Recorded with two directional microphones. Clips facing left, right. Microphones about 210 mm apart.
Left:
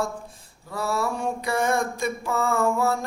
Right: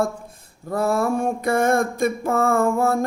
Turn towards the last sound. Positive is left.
turn(degrees=-50)  # may be behind; listen again after turning